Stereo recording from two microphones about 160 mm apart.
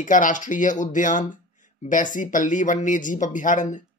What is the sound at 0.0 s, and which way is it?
Speech, 55° left (ahead or behind).